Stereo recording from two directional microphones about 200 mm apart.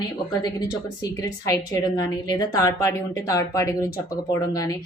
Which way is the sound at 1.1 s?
15° left (ahead or behind).